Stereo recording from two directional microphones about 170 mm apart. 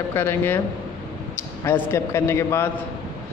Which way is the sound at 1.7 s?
15° left (ahead or behind).